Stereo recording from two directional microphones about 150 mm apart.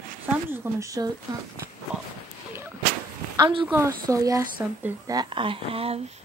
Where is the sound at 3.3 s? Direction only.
30° right (ahead or behind).